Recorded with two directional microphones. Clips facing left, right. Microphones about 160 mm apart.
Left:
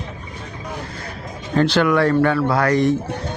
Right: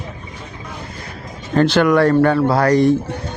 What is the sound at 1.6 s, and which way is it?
Speech, 50° right (ahead or behind).